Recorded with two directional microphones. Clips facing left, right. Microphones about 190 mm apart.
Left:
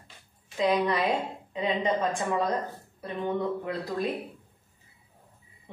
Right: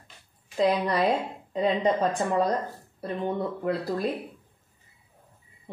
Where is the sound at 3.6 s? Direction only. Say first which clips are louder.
Right 3 dB; 35° right (ahead or behind).